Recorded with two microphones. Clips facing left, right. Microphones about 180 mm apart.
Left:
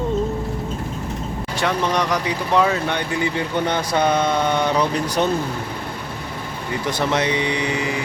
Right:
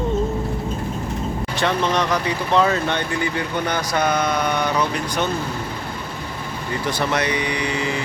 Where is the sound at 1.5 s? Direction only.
10° left (ahead or behind).